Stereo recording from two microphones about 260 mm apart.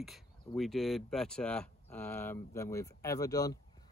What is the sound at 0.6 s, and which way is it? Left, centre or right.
Speech, centre.